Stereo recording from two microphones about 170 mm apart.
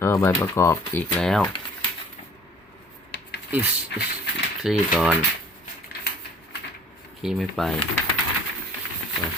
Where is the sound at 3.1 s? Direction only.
80° left.